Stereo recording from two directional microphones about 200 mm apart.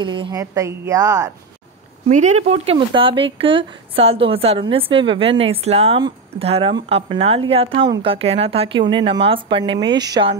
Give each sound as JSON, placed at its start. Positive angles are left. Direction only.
{"t": 0.0, "sound": "a woman's voice", "side_deg": -25}
{"t": 2.0, "sound": "speech", "side_deg": -35}